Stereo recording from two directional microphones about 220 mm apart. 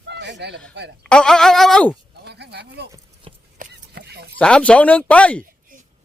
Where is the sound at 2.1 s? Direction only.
50° right (ahead or behind).